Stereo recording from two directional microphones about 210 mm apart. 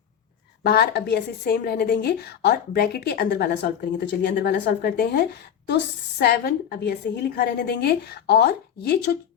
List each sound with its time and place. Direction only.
0.6 s a woman's voice: 50° left (ahead or behind)